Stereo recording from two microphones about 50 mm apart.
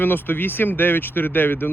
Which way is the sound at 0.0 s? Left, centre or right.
Left.